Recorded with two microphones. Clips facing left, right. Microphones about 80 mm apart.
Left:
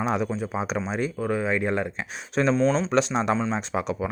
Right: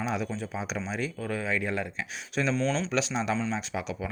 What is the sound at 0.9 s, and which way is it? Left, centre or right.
Speech, left.